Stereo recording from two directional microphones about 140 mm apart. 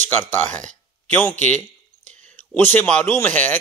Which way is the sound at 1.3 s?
60° right (ahead or behind).